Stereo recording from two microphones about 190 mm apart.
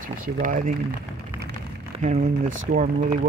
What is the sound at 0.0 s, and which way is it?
Speech, 45° right (ahead or behind).